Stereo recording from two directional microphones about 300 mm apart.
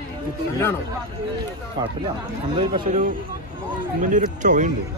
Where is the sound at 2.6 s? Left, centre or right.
Right.